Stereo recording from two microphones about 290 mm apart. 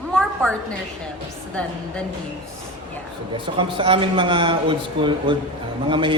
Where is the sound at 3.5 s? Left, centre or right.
Centre.